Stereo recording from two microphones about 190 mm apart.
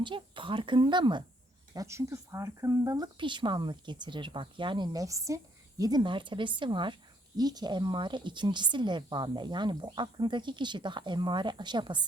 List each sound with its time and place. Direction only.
0.0 s speech: 25° right (ahead or behind)